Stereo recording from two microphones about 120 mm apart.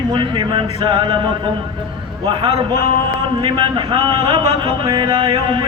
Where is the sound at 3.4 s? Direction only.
45° right (ahead or behind).